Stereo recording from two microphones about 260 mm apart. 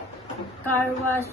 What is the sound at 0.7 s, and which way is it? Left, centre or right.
Speech, centre.